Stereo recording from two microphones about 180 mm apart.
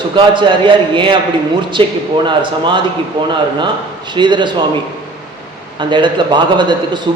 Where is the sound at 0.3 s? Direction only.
25° right (ahead or behind).